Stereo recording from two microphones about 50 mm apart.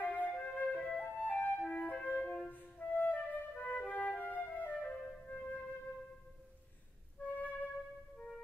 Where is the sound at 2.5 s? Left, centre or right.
Left.